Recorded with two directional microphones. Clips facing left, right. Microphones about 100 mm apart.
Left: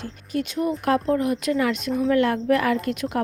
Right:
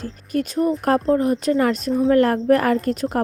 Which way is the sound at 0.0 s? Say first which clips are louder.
Right 4 dB; 40° right (ahead or behind).